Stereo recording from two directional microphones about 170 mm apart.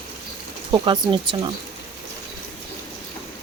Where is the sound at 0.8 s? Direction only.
30° right (ahead or behind).